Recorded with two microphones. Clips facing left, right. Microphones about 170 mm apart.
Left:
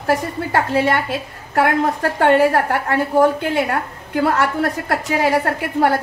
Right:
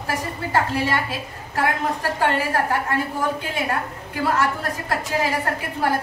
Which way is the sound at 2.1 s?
65° left (ahead or behind).